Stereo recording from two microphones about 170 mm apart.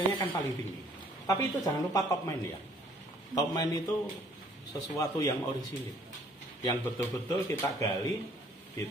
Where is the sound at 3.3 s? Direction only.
20° left (ahead or behind).